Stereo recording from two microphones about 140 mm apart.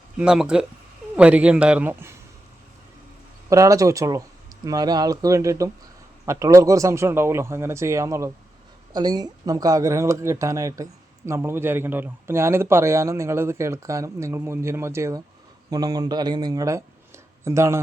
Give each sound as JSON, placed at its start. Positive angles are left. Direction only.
{"t": 0.2, "sound": "speech", "side_deg": -5}
{"t": 3.5, "sound": "speech", "side_deg": -25}